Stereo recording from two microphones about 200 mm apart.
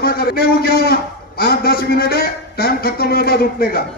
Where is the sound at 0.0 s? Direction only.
50° left (ahead or behind).